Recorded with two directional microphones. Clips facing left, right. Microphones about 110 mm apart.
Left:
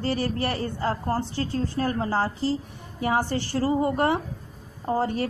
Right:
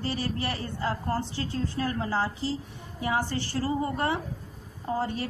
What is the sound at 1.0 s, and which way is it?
A woman's voice, 40° left (ahead or behind).